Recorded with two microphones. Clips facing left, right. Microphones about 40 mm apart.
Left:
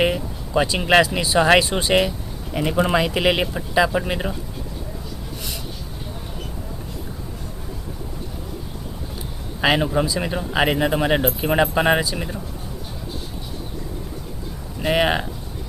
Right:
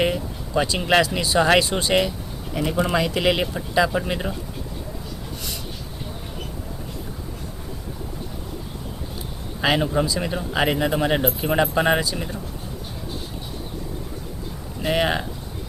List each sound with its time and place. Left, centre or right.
0.0 s speech: centre
9.6 s speech: centre
14.8 s speech: centre